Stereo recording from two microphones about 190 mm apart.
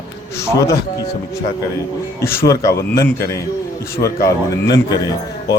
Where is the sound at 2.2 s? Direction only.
15° left (ahead or behind).